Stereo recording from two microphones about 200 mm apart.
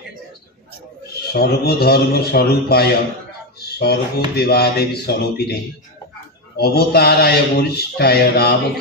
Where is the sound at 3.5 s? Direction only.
50° left (ahead or behind).